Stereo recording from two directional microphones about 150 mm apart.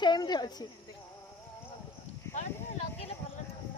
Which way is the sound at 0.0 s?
30° left (ahead or behind).